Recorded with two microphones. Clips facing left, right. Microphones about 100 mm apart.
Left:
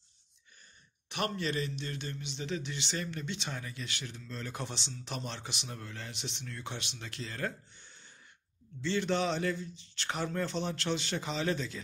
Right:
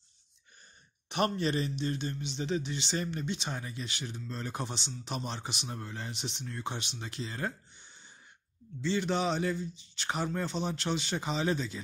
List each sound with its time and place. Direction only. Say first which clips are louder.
1.1 s a man's voice: right 4 dB; 30° right (ahead or behind)